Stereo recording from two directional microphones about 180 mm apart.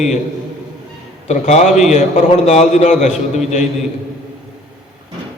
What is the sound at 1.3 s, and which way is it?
A man's voice, 40° left (ahead or behind).